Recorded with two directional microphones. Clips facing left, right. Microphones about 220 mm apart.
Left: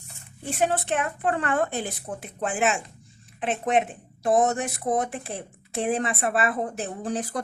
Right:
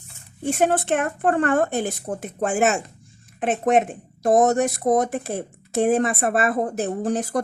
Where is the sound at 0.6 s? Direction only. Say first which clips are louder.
Right 4 dB; 50° right (ahead or behind).